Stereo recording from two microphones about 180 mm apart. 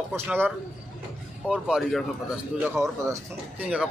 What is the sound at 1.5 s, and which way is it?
Speech, centre (ahead or behind).